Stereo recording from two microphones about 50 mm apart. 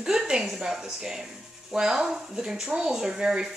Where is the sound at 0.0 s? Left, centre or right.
Centre.